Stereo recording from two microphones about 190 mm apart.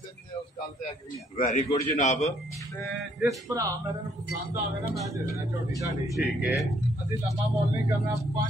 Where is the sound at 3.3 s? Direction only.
15° right (ahead or behind).